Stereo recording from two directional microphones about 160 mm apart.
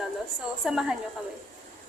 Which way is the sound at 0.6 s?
5° right (ahead or behind).